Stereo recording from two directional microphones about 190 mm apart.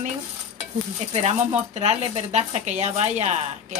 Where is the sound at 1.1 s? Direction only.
35° right (ahead or behind).